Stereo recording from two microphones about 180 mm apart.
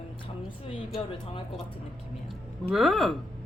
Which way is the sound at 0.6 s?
30° left (ahead or behind).